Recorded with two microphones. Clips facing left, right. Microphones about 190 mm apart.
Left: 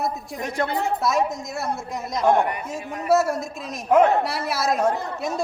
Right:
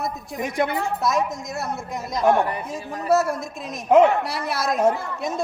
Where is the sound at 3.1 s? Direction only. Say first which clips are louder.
Even; centre (ahead or behind).